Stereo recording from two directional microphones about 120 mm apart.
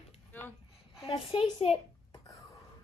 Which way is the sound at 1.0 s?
45° left (ahead or behind).